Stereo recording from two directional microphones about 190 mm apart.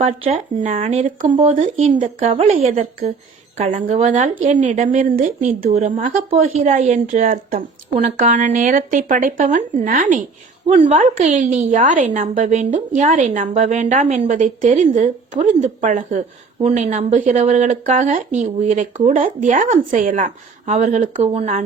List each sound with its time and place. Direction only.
0.0 s a woman's voice: 40° right (ahead or behind)